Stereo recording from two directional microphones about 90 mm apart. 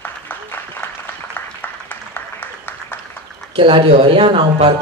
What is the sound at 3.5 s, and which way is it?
Speech, 75° right (ahead or behind).